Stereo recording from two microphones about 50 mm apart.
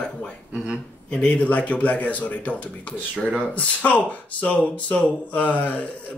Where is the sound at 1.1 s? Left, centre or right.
Left.